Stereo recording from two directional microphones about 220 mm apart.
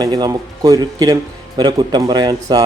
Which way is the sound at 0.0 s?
20° right (ahead or behind).